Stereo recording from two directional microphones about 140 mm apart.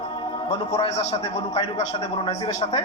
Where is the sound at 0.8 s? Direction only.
50° left (ahead or behind).